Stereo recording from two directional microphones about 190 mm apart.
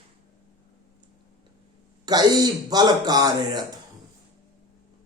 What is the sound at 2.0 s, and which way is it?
A man's voice, 20° right (ahead or behind).